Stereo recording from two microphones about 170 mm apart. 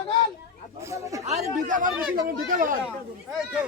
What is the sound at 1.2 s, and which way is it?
Speech, 45° right (ahead or behind).